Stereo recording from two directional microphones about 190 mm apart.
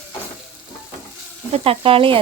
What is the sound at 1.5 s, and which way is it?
Speech, 30° right (ahead or behind).